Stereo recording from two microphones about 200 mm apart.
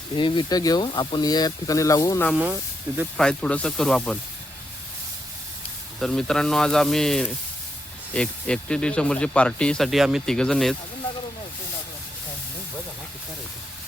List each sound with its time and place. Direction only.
0.2 s speech: 25° left (ahead or behind)
2.3 s speech: 10° right (ahead or behind)
3.2 s speech: 5° left (ahead or behind)
6.0 s speech: centre (ahead or behind)